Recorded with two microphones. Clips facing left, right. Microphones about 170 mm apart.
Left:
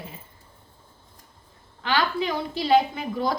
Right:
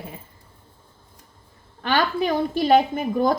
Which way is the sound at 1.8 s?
50° right (ahead or behind).